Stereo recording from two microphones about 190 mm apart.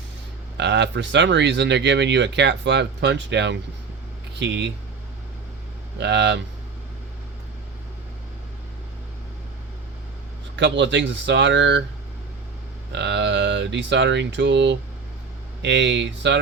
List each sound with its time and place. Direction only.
0.5 s speech: 65° right (ahead or behind)
6.0 s speech: 65° right (ahead or behind)
10.6 s speech: 70° right (ahead or behind)
12.9 s speech: 65° right (ahead or behind)